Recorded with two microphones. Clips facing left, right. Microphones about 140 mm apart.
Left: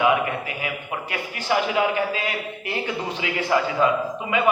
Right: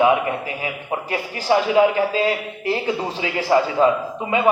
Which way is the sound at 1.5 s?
30° right (ahead or behind).